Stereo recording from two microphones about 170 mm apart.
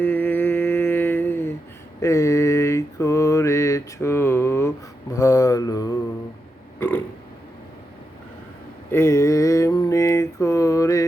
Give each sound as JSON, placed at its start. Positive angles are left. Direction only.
{"t": 0.0, "sound": "humming", "side_deg": 10}
{"t": 2.0, "sound": "mantra", "side_deg": 15}
{"t": 6.7, "sound": "a sound", "side_deg": 10}
{"t": 8.9, "sound": "mantra", "side_deg": 15}